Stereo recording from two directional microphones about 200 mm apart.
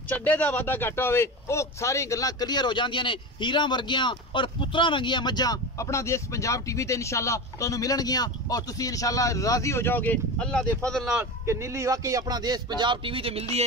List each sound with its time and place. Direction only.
0.1 s speech: 10° left (ahead or behind)
11.1 s speech: 15° right (ahead or behind); by 13.5 s 30° right (ahead or behind)